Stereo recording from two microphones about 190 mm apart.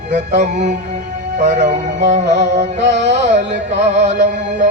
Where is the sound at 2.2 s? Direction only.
65° right (ahead or behind).